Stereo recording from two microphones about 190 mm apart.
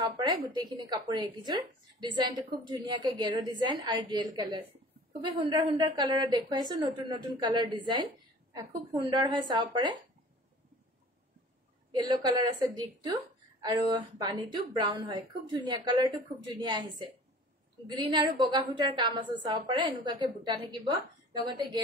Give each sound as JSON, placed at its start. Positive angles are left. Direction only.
{"t": 0.0, "sound": "speech", "side_deg": -20}
{"t": 11.9, "sound": "speech", "side_deg": -20}
{"t": 17.9, "sound": "speech", "side_deg": -20}